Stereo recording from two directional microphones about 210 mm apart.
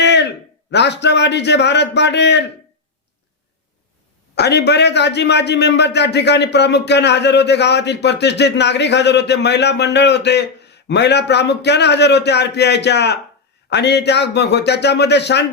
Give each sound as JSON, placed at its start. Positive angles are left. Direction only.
{"t": 0.0, "sound": "a sound", "side_deg": 55}
{"t": 0.7, "sound": "a man's voice", "side_deg": 55}
{"t": 4.4, "sound": "a man's voice", "side_deg": 55}